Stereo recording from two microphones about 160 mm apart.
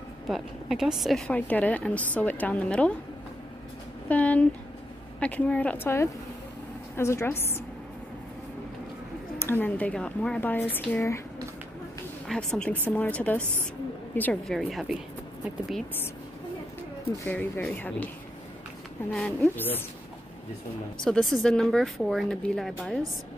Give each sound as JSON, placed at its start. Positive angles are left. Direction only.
{"t": 0.3, "sound": "a woman's voice", "side_deg": 0}
{"t": 4.1, "sound": "a woman's voice", "side_deg": 10}
{"t": 9.4, "sound": "a woman's voice", "side_deg": 10}
{"t": 12.3, "sound": "a woman's voice", "side_deg": 5}
{"t": 17.2, "sound": "a woman's voice", "side_deg": 10}
{"t": 21.0, "sound": "a woman's voice", "side_deg": 5}